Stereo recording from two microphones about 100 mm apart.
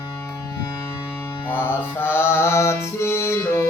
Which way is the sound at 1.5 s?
20° left (ahead or behind).